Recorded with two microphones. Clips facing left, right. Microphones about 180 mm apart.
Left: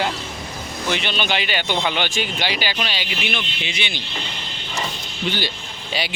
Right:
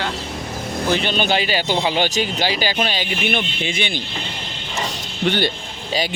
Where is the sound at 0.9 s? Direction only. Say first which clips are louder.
Right 4 dB; 40° right (ahead or behind).